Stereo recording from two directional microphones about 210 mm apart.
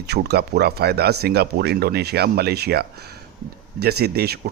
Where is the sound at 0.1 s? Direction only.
50° right (ahead or behind).